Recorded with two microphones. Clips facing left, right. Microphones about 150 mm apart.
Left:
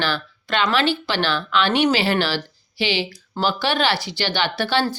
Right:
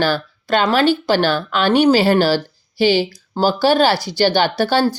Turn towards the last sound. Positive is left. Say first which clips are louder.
# right 5 dB
turn(degrees=-40)  # may be behind; listen again after turning